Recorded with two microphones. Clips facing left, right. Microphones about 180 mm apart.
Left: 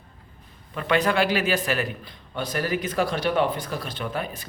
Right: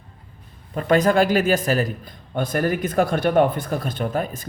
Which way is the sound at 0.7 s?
40° right (ahead or behind).